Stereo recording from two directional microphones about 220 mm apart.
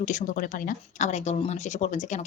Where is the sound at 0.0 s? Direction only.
35° left (ahead or behind).